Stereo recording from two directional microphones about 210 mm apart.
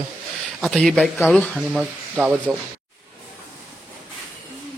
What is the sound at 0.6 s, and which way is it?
Speech, centre (ahead or behind).